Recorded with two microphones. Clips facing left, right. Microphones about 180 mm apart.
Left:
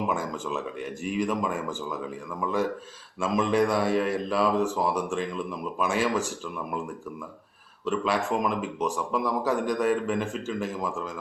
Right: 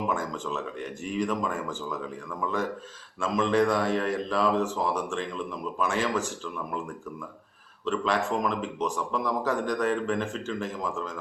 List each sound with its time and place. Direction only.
0.1 s a man's voice: 10° left (ahead or behind)
7.9 s a man's voice: 10° left (ahead or behind)